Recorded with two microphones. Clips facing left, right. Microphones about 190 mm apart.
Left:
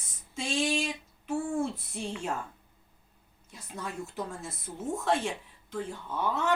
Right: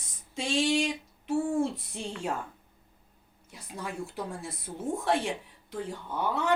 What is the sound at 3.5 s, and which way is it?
Speech, 10° right (ahead or behind).